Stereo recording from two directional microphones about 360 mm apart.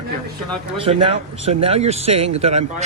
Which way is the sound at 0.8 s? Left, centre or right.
Centre.